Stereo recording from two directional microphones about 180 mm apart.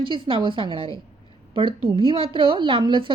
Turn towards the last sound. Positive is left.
turn(degrees=-25)  # may be behind; listen again after turning